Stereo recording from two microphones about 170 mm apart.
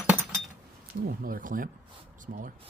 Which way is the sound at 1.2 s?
55° right (ahead or behind).